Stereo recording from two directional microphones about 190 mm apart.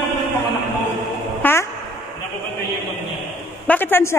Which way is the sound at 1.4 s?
10° left (ahead or behind).